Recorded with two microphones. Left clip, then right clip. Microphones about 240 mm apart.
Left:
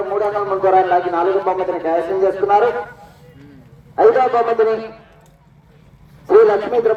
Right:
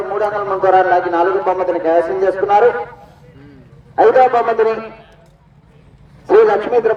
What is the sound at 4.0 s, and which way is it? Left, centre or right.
Speech, right.